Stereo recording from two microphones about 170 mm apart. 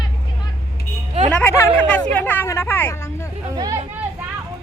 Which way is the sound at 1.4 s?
10° left (ahead or behind).